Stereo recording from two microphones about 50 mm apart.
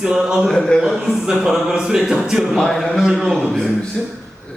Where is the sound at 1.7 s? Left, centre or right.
Centre.